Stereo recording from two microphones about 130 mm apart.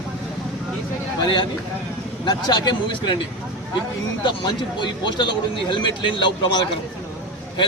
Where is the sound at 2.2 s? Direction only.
35° left (ahead or behind).